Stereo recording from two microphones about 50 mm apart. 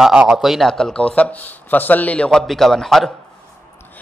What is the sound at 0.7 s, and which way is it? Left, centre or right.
Speech, centre.